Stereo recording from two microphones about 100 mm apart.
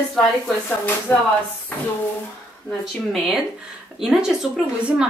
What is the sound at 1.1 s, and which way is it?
Speech, 20° left (ahead or behind).